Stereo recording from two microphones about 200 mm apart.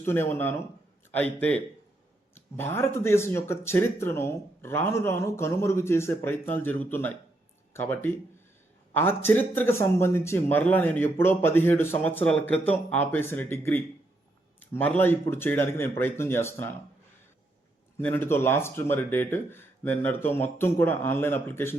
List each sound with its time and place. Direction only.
0.0 s speech: 10° left (ahead or behind)
17.9 s speech: 10° left (ahead or behind)